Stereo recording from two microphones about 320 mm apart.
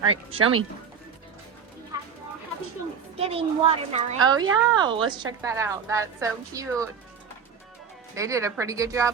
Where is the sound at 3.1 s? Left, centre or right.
Centre.